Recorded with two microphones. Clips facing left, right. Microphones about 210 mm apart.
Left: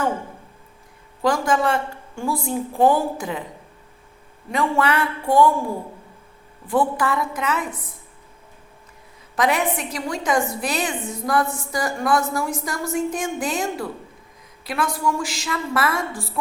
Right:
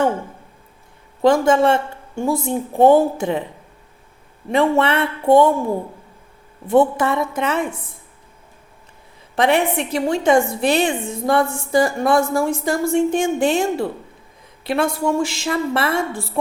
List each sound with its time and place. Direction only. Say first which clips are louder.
1.2 s a woman's voice: right 6 dB; 25° right (ahead or behind)
4.5 s a woman's voice: right 4 dB; 25° right (ahead or behind)
6.7 s a woman's voice: right 5 dB; 25° right (ahead or behind)
9.3 s a woman's voice: right 4 dB; 30° right (ahead or behind)